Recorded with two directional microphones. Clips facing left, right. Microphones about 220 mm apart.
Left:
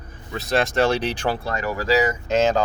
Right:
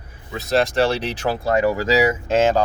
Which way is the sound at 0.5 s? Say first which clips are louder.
Right 2 dB; 35° right (ahead or behind).